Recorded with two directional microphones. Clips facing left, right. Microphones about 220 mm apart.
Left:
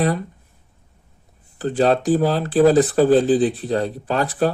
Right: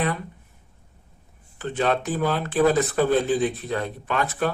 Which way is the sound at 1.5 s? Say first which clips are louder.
Left 6 dB; 35° left (ahead or behind).